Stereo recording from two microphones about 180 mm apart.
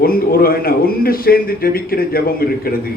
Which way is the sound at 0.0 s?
55° left (ahead or behind).